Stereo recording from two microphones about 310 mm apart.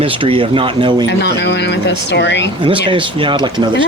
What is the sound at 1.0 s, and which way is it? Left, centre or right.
Speech, left.